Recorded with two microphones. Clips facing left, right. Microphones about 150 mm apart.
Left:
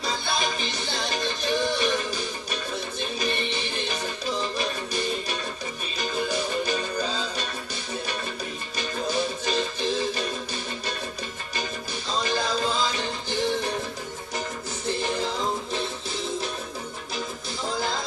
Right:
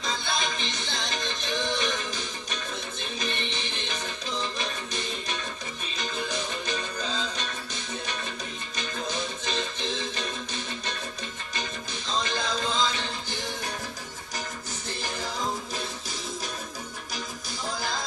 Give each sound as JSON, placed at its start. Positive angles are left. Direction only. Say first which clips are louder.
{"t": 0.0, "sound": "music", "louder": "left 3 dB", "side_deg": 10}
{"t": 8.7, "sound": "music", "louder": "left 6 dB", "side_deg": 10}
{"t": 12.2, "sound": "music", "louder": "left 4 dB", "side_deg": 10}